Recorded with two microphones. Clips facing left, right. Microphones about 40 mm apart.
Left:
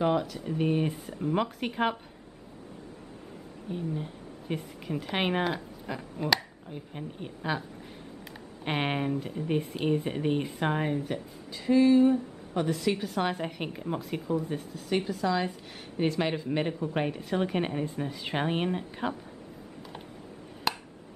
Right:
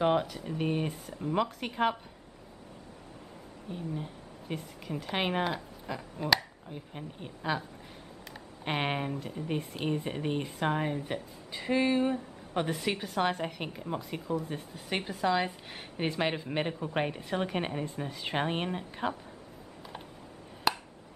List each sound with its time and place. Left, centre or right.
0.0 s speech: centre
0.4 s speech: centre
3.7 s a woman's voice: centre
8.6 s speech: centre
11.5 s speech: right
13.0 s speech: centre
14.9 s speech: right; by 19.1 s centre
20.7 s a sound: centre